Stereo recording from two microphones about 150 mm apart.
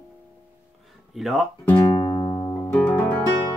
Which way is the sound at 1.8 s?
30° left (ahead or behind).